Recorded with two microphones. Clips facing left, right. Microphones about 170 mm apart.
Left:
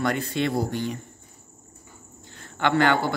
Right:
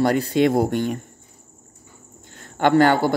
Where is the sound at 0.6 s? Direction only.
55° right (ahead or behind).